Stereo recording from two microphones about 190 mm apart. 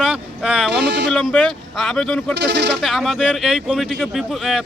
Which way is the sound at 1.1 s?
5° left (ahead or behind).